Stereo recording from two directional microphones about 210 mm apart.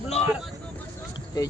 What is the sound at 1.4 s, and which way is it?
Speech, 20° left (ahead or behind).